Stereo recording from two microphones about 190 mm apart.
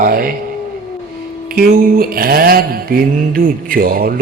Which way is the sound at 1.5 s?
50° right (ahead or behind).